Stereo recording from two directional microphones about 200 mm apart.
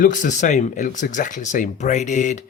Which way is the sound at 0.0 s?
40° left (ahead or behind).